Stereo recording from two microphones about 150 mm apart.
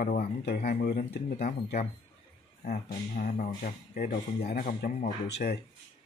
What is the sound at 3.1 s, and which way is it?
Speech, 75° left (ahead or behind).